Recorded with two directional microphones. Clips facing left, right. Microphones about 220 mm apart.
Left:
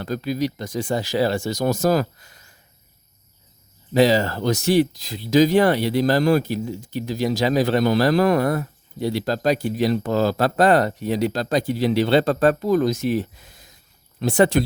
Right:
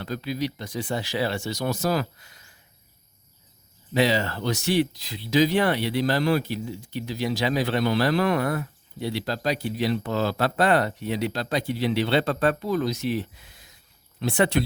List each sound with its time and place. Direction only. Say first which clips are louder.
0.0 s speech: left 5 dB; 45° left (ahead or behind)
3.9 s speech: left 6 dB; 40° left (ahead or behind)